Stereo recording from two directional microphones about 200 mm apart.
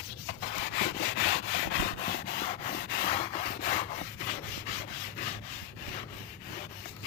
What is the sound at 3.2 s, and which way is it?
Rub, 35° left (ahead or behind).